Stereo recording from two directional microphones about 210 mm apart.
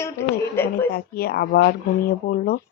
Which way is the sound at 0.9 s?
45° left (ahead or behind).